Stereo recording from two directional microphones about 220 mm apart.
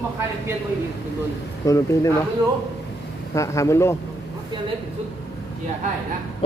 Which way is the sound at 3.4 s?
15° left (ahead or behind).